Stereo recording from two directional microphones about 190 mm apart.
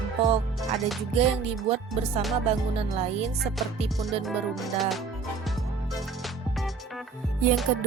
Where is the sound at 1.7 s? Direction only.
30° right (ahead or behind).